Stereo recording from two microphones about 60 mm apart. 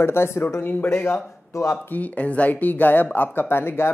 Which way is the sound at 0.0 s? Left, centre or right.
Left.